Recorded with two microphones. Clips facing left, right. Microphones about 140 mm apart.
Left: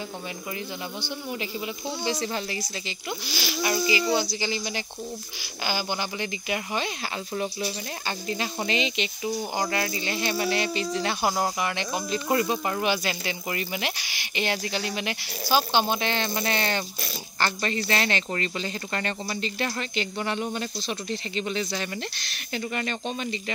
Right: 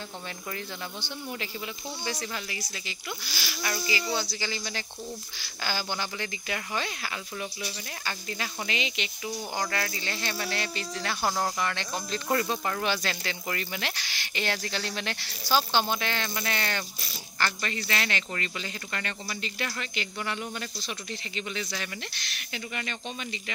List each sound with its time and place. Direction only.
2.0 s speech: 30° left (ahead or behind)
3.6 s speech: 15° left (ahead or behind)
8.3 s speech: 25° left (ahead or behind)